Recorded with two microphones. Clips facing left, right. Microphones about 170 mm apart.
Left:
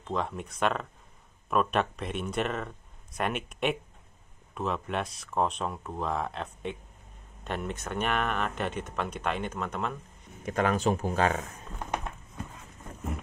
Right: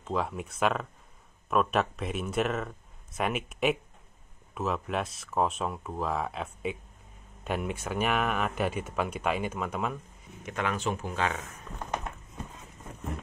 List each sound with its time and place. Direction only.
0.0 s speech: 5° right (ahead or behind)
10.4 s speech: 40° left (ahead or behind)